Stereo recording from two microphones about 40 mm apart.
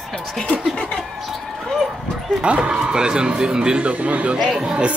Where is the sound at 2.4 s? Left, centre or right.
Right.